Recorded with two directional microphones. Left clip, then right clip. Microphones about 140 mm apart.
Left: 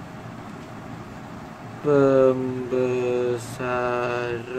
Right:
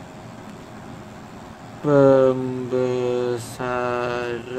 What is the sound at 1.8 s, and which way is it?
Mantra, 45° right (ahead or behind).